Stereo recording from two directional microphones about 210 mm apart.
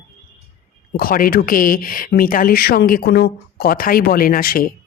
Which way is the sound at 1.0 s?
45° left (ahead or behind).